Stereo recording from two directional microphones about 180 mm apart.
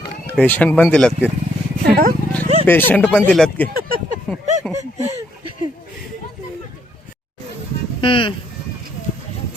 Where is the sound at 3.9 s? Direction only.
50° right (ahead or behind).